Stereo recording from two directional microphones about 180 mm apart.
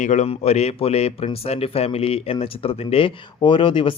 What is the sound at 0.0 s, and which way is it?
A man's voice, 40° left (ahead or behind).